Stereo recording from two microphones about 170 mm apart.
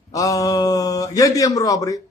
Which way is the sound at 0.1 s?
20° left (ahead or behind).